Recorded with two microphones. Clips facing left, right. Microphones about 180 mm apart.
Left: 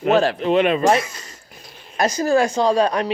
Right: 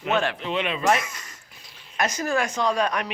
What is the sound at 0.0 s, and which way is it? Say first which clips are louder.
Speech: left 8 dB; 35° left (ahead or behind).